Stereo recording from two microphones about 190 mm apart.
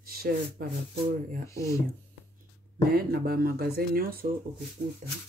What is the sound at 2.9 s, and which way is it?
Speech, 50° right (ahead or behind).